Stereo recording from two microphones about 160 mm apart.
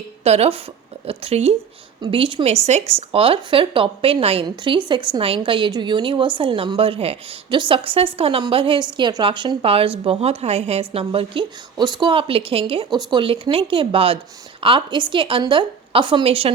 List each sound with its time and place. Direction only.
0.3 s a woman's voice: 40° right (ahead or behind)